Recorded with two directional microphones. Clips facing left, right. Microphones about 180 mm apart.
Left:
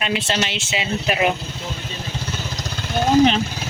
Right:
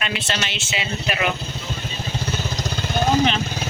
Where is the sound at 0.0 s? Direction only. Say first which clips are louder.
Left 4 dB; 25° left (ahead or behind).